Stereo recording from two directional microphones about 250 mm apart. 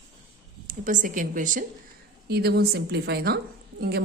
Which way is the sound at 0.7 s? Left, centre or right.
Right.